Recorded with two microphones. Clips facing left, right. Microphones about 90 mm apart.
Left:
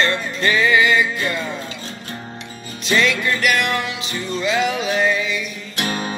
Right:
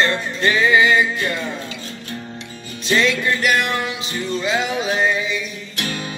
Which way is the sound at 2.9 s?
25° right (ahead or behind).